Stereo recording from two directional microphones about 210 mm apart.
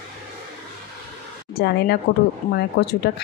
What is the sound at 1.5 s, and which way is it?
Speech, 50° left (ahead or behind).